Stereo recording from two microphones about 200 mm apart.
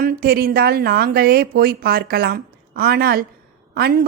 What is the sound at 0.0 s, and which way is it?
Speech, 50° right (ahead or behind).